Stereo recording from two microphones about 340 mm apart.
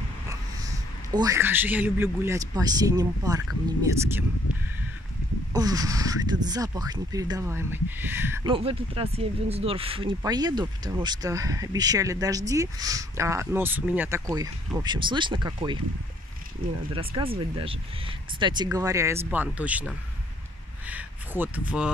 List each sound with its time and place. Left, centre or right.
1.1 s speech: centre
5.5 s speech: centre
16.9 s speech: centre